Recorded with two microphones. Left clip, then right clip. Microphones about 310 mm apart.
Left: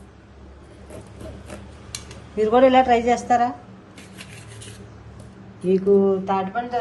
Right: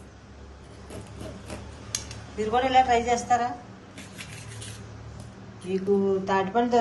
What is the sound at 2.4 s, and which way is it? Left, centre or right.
A woman's voice, centre.